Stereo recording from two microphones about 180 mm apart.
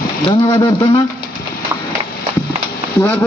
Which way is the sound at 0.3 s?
20° left (ahead or behind).